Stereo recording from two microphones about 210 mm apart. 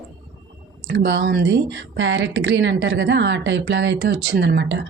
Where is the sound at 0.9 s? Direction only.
55° right (ahead or behind).